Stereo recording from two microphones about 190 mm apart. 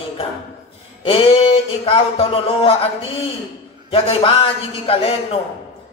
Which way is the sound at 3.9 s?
30° left (ahead or behind).